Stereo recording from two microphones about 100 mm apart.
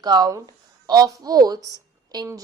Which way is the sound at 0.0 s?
40° right (ahead or behind).